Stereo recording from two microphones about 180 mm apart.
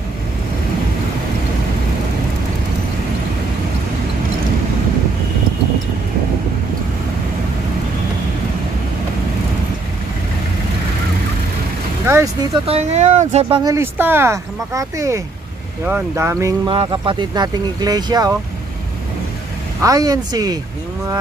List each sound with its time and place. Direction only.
12.6 s speech: 35° right (ahead or behind)
19.8 s speech: 20° right (ahead or behind)